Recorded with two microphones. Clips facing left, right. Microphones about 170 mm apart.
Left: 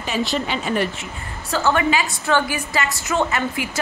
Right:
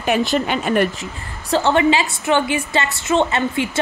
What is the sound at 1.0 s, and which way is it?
A woman's voice, 35° right (ahead or behind).